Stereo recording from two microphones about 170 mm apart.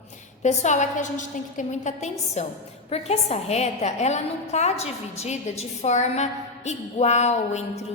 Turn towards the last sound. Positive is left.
turn(degrees=40)  # may be behind; listen again after turning